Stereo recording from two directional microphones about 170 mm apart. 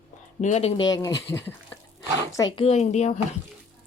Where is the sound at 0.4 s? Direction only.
40° left (ahead or behind).